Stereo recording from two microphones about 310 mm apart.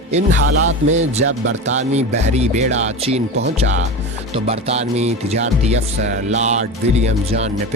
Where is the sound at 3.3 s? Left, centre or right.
Right.